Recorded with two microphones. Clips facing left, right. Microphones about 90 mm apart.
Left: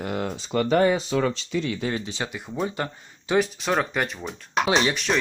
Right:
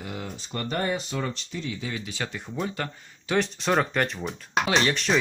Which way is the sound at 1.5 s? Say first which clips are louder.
Left 7 dB; 75° left (ahead or behind).